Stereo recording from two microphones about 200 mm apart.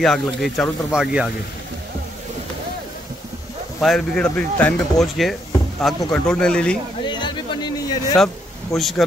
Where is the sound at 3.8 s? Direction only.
5° left (ahead or behind).